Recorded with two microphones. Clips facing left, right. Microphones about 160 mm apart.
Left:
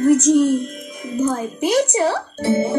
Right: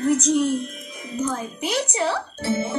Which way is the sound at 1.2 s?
45° left (ahead or behind).